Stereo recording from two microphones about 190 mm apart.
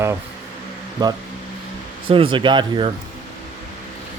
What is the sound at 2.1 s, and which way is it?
Speech, 25° right (ahead or behind).